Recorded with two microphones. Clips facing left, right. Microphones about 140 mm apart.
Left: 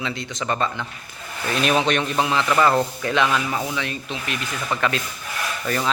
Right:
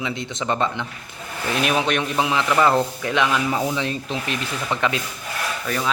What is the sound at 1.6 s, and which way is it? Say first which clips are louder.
A man's voice: left 2 dB; 10° right (ahead or behind).